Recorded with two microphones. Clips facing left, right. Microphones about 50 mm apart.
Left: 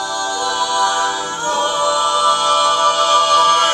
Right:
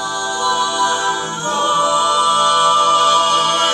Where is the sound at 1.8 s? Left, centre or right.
Right.